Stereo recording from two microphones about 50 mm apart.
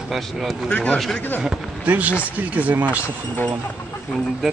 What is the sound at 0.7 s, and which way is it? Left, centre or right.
Speech, left.